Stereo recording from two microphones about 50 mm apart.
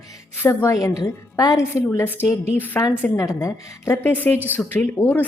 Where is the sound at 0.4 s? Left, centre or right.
Left.